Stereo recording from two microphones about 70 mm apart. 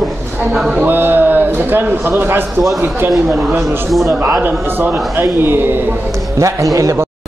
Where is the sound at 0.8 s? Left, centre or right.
Right.